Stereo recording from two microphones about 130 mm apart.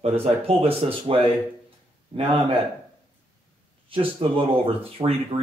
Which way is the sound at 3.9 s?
45° right (ahead or behind).